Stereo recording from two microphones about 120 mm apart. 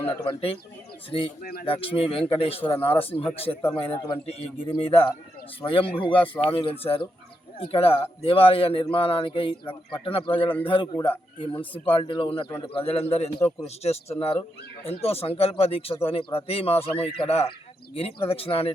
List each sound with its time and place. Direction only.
0.1 s speech: 50° left (ahead or behind)
2.7 s speech: 15° left (ahead or behind)
3.3 s speech: 55° left (ahead or behind)
11.9 s speech: 45° left (ahead or behind)